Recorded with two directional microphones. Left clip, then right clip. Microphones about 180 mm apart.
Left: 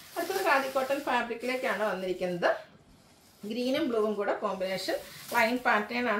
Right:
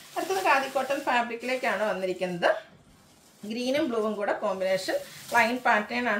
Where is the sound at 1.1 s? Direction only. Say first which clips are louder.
Right 5 dB; 15° right (ahead or behind).